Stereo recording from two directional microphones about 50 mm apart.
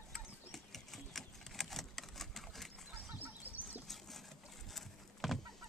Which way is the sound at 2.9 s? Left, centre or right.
Right.